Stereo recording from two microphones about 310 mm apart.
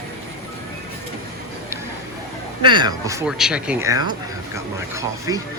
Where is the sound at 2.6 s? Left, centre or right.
Centre.